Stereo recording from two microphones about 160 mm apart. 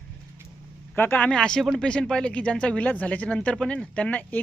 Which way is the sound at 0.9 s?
10° left (ahead or behind).